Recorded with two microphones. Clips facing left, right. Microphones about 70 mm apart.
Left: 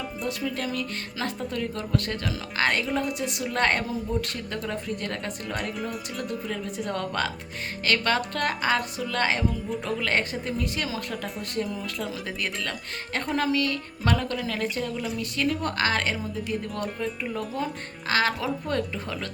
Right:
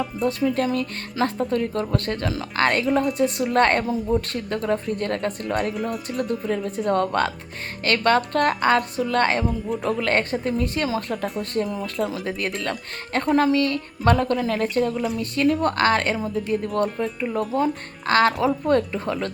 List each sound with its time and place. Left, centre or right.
0.3 s speech: right